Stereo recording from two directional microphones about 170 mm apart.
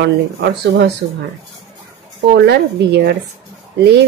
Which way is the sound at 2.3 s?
75° right (ahead or behind).